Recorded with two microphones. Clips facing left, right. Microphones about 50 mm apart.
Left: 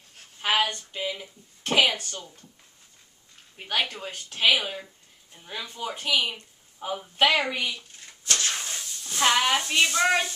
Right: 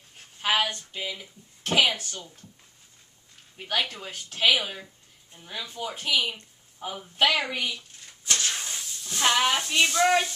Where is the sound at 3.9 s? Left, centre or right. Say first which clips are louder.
Left 1 dB; centre.